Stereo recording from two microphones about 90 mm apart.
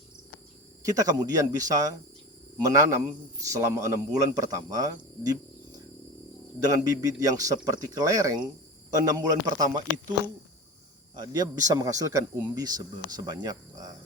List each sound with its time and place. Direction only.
0.8 s speech: 40° right (ahead or behind)
6.6 s speech: 45° right (ahead or behind)
11.1 s speech: 50° right (ahead or behind)